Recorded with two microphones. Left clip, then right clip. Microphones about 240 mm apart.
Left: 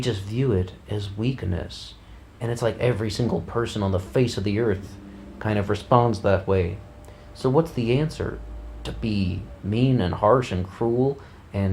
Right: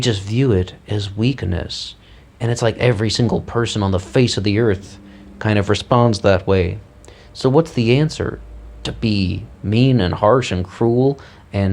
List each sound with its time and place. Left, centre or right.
0.0 s speech: right